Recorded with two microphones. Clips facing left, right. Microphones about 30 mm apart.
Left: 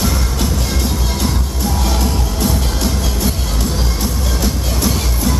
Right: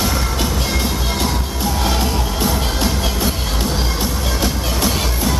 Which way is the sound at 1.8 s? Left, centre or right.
Right.